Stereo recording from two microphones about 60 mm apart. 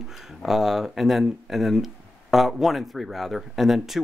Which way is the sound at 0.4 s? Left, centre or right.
Centre.